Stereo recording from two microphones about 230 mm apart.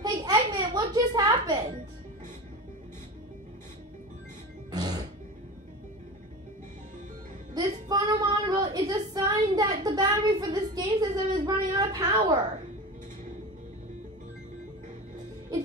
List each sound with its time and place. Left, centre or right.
0.0 s music: centre
4.6 s music: centre
7.5 s female singing: centre